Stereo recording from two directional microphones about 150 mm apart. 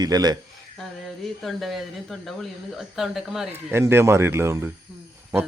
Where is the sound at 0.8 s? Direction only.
Centre (ahead or behind).